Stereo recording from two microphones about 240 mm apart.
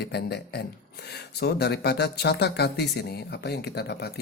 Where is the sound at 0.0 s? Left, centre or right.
Left.